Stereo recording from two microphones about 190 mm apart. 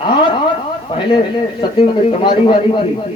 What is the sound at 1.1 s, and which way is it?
A man's voice, 25° left (ahead or behind).